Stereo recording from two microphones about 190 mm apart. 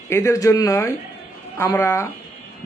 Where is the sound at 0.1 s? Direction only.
15° left (ahead or behind).